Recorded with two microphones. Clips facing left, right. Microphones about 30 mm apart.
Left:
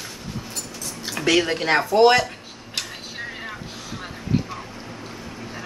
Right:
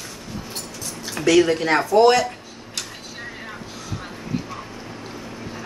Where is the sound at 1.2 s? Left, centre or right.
Left.